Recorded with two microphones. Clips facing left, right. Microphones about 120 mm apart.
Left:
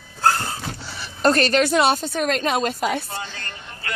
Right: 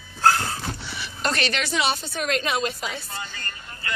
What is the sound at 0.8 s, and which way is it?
A woman's voice, 40° left (ahead or behind).